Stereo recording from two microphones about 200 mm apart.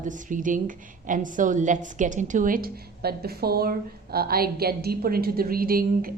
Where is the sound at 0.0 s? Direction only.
40° right (ahead or behind).